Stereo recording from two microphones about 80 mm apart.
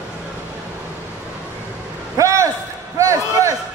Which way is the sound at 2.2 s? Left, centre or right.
Right.